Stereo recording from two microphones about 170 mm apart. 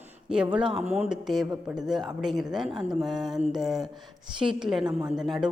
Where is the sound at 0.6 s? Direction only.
30° right (ahead or behind).